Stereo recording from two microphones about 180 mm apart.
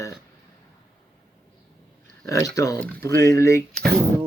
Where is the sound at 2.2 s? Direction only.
20° left (ahead or behind).